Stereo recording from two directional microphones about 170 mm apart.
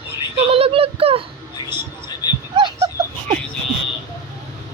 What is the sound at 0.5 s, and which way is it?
Speech, 35° right (ahead or behind).